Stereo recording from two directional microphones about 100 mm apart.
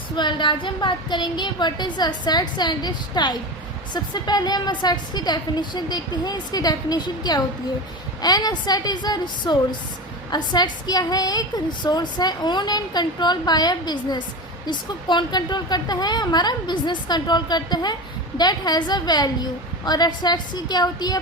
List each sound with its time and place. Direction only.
0.2 s a woman's voice: 50° left (ahead or behind)